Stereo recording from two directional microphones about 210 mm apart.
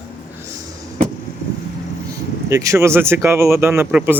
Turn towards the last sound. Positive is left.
turn(degrees=-10)  # may be behind; listen again after turning